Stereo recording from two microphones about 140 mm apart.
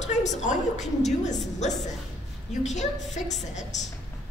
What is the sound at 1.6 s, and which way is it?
A woman's voice, 55° left (ahead or behind).